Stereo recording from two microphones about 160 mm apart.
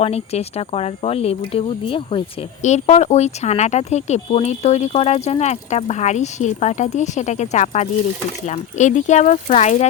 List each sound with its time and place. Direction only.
0.0 s speech: 40° left (ahead or behind)
2.6 s speech: 45° left (ahead or behind)